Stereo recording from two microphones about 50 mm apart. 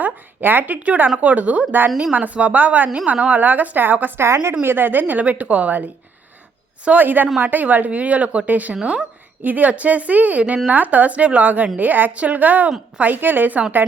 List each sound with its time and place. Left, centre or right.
0.0 s speech: right
4.2 s a woman's voice: right
4.6 s speech: right
8.7 s speech: centre
9.4 s speech: right